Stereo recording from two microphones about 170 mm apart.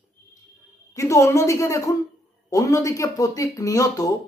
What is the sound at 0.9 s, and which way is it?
A woman's voice, 20° left (ahead or behind).